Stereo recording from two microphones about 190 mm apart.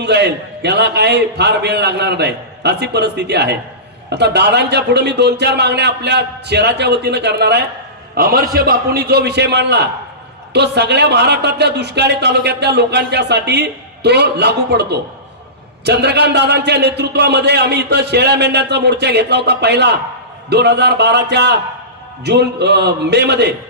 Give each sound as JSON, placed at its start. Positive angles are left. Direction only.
{"t": 0.0, "sound": "speech", "side_deg": -65}